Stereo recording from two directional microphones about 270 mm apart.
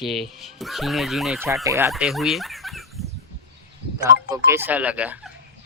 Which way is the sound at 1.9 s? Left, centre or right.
Centre.